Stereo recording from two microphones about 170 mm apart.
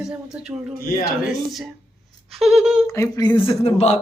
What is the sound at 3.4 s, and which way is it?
Speech, 35° left (ahead or behind).